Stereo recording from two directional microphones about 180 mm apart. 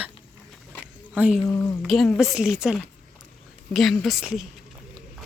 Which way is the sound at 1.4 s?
15° left (ahead or behind).